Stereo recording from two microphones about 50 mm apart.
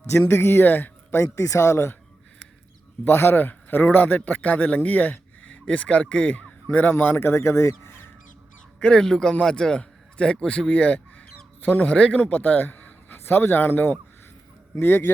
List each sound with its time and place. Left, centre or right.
0.3 s speech: left
1.1 s speech: left
3.0 s speech: left
7.0 s speech: left
7.3 s speech: left
8.8 s speech: left
9.0 s a man's voice: centre; by 13.1 s left
13.1 s a man's voice: left